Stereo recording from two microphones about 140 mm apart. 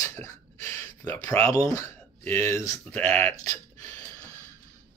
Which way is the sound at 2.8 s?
10° left (ahead or behind).